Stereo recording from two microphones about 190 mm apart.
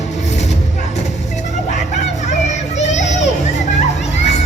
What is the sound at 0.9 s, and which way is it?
Vehicle, 35° left (ahead or behind).